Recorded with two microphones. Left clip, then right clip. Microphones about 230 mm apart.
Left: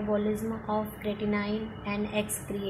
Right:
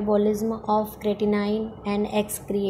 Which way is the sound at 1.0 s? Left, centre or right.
Right.